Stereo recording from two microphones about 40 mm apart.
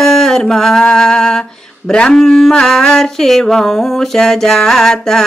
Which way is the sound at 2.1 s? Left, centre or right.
Centre.